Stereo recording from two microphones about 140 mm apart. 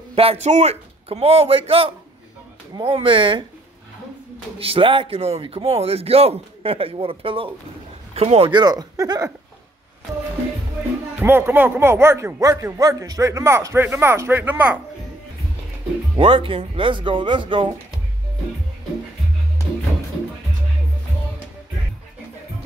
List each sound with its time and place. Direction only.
0.1 s speech: 45° right (ahead or behind)
4.6 s speech: 40° right (ahead or behind)
8.5 s speech: 30° right (ahead or behind)
11.1 s a man's voice: 15° right (ahead or behind)
16.2 s speech: 40° right (ahead or behind)